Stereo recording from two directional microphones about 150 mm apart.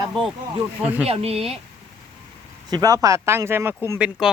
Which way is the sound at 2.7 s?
25° right (ahead or behind).